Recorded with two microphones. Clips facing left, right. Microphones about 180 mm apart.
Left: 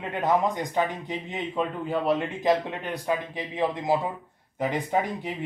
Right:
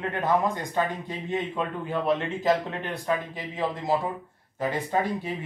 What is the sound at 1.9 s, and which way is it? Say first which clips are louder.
Speech: right 1 dB; 5° left (ahead or behind).